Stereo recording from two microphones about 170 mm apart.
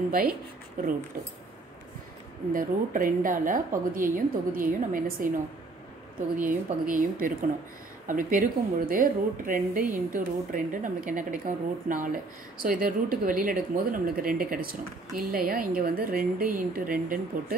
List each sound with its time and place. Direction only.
0.1 s speech: 55° right (ahead or behind)
2.5 s speech: 55° right (ahead or behind)
6.4 s speech: 50° right (ahead or behind)